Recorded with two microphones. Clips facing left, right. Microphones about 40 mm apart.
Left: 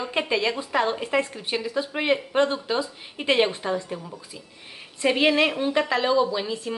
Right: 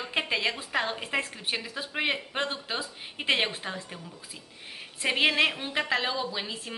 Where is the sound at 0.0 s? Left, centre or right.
Centre.